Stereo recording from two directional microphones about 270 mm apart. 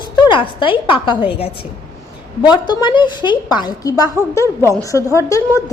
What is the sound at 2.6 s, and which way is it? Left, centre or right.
A woman's voice, centre.